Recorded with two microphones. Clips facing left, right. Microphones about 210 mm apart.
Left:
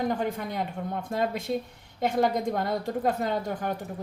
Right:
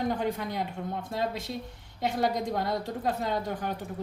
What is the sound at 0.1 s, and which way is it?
A woman's voice, 50° left (ahead or behind).